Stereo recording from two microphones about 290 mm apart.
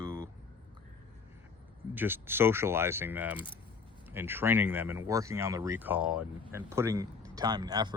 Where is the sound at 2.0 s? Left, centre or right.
Centre.